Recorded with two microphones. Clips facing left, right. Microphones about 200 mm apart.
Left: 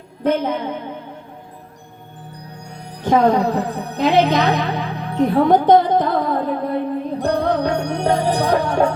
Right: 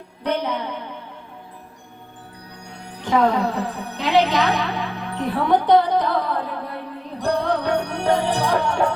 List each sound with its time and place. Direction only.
0.2 s speech: 50° left (ahead or behind)
3.0 s speech: 45° left (ahead or behind)
5.1 s music: 45° left (ahead or behind)